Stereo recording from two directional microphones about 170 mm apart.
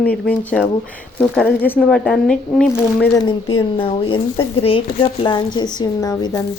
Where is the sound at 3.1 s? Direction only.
25° left (ahead or behind).